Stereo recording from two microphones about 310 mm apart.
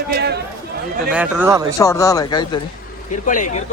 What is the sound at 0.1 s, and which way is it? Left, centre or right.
Chatter, right.